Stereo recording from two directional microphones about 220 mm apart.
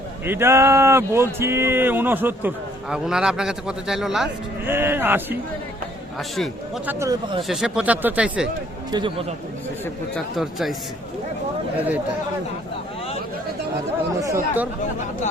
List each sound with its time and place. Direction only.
0.3 s speech: 10° right (ahead or behind)
7.0 s speech: 20° right (ahead or behind)
7.4 s speech: centre (ahead or behind)
8.9 s speech: 20° right (ahead or behind)
10.3 s speech: centre (ahead or behind)
14.2 s speech: 10° right (ahead or behind)